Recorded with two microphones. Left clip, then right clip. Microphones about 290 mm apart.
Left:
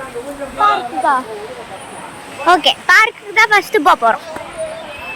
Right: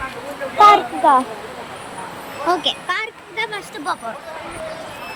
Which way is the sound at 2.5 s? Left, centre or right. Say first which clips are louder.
Left 9 dB; centre.